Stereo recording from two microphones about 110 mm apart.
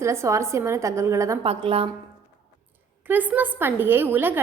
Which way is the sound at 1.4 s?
55° right (ahead or behind).